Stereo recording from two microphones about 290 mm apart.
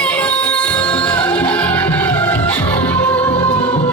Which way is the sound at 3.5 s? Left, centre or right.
Centre.